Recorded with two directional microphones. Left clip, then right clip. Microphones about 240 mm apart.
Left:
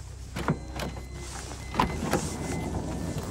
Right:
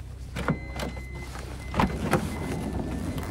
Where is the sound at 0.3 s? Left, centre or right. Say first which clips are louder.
Right 1 dB; left.